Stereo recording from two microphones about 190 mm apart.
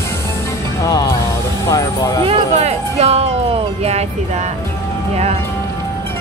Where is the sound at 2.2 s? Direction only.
35° right (ahead or behind).